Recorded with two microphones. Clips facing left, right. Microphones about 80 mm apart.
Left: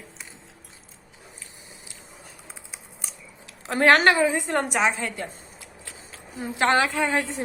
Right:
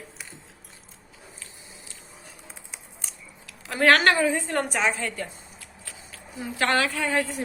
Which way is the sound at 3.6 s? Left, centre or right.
Left.